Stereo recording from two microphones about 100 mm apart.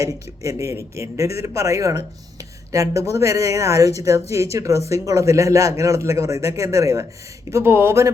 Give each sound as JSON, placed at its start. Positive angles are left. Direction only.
{"t": 0.0, "sound": "speech", "side_deg": -30}